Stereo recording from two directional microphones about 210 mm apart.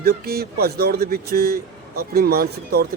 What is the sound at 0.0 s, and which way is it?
Speech, 50° right (ahead or behind).